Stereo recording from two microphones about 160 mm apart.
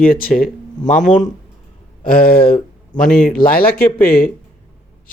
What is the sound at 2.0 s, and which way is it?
Speech, 65° left (ahead or behind).